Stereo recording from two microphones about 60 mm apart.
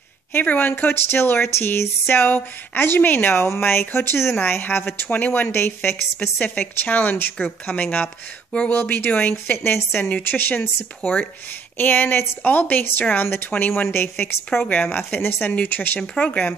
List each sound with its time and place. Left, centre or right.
0.3 s a woman's voice: left
4.4 s a woman's voice: left
9.6 s a woman's voice: left
16.0 s speech: centre